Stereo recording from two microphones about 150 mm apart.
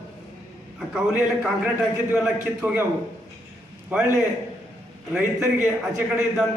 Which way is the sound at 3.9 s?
10° right (ahead or behind).